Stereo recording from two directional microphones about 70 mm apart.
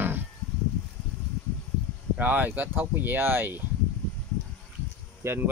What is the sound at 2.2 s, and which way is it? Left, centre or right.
Speech, right.